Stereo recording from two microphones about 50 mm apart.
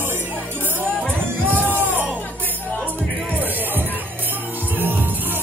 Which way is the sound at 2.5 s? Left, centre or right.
Left.